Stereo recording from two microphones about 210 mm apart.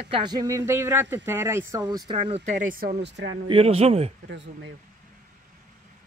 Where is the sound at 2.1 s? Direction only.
30° right (ahead or behind).